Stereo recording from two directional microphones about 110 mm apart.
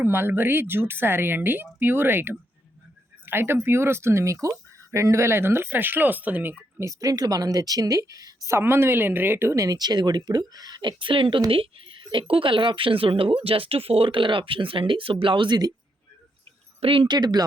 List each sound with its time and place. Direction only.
0.0 s speech: 20° right (ahead or behind)
7.0 s speech: 35° right (ahead or behind)
16.8 s speech: 55° right (ahead or behind)